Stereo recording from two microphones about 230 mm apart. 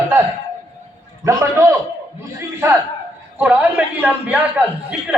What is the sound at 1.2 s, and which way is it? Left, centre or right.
Speech, centre.